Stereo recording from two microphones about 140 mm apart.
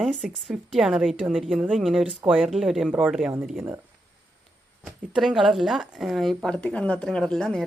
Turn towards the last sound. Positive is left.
turn(degrees=5)  # may be behind; listen again after turning